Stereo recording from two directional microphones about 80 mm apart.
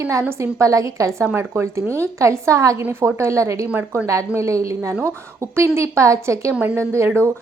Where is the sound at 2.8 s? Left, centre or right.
Right.